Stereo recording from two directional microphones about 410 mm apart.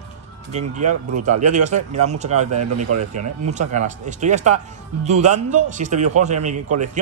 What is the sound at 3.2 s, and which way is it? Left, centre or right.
Speech, centre.